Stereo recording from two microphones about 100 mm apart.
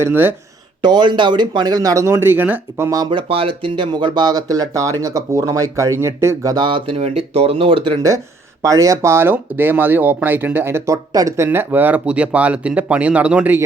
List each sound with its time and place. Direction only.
0.0 s speech: 20° right (ahead or behind)
0.8 s speech: 50° right (ahead or behind); by 2.9 s 20° right (ahead or behind)
2.9 s speech: 50° right (ahead or behind); by 6.5 s 30° right (ahead or behind)
6.5 s speech: 50° right (ahead or behind)
6.9 s speech: 75° right (ahead or behind)
8.6 s speech: 35° right (ahead or behind)
11.4 s speech: 20° right (ahead or behind)